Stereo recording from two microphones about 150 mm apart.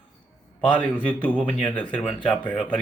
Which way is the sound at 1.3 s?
35° left (ahead or behind).